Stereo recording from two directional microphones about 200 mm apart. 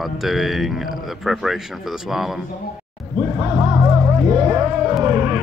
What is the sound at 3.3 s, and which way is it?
Music, 25° right (ahead or behind).